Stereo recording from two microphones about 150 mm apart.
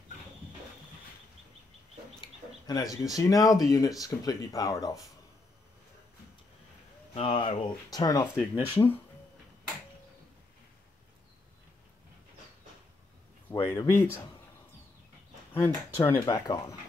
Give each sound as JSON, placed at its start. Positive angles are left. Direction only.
{"t": 2.1, "sound": "a sound", "side_deg": 25}
{"t": 3.6, "sound": "speech", "side_deg": 25}
{"t": 7.2, "sound": "speech", "side_deg": 35}
{"t": 13.5, "sound": "speech", "side_deg": 15}
{"t": 15.5, "sound": "speech", "side_deg": 15}